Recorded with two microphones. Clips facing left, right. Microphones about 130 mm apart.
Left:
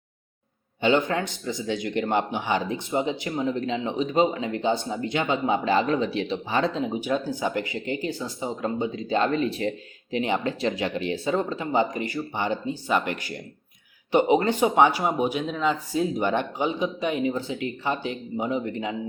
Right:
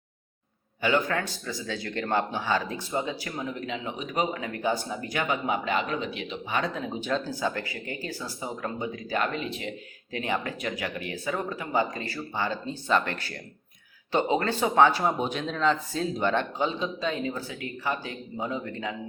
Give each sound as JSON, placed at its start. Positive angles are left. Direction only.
{"t": 0.8, "sound": "speech", "side_deg": 25}
{"t": 6.8, "sound": "speech", "side_deg": 15}
{"t": 10.1, "sound": "speech", "side_deg": 20}